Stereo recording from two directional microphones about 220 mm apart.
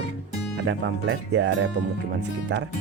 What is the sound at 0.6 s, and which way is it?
Speech, 60° right (ahead or behind).